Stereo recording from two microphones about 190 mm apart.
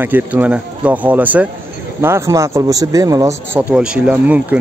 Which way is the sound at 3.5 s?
5° right (ahead or behind).